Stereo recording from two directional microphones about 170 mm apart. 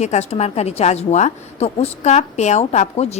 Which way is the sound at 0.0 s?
40° left (ahead or behind).